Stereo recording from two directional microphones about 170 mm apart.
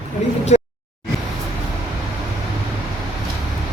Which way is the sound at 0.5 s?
40° left (ahead or behind).